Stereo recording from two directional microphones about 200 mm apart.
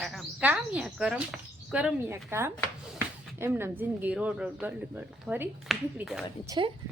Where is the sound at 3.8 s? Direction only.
10° right (ahead or behind).